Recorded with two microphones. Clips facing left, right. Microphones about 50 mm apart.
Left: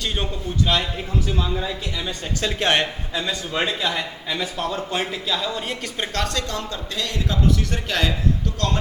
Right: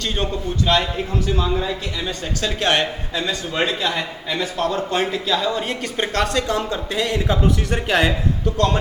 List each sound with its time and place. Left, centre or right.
0.7 s a man's voice: centre
1.5 s speech: centre
2.0 s speech: centre
3.2 s a man's voice: centre